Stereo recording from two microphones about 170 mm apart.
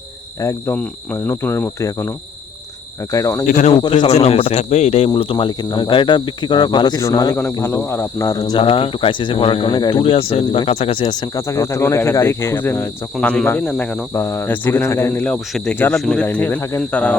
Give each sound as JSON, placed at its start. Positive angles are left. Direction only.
{"t": 0.3, "sound": "speech", "side_deg": 15}
{"t": 3.4, "sound": "speech", "side_deg": 45}
{"t": 4.0, "sound": "cricket", "side_deg": 35}
{"t": 11.0, "sound": "speech", "side_deg": 25}